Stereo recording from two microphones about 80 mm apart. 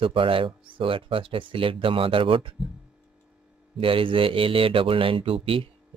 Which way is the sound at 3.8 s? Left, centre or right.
Right.